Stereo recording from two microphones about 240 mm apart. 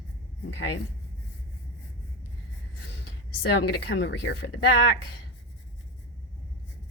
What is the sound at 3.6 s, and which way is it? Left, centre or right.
A woman's voice, left.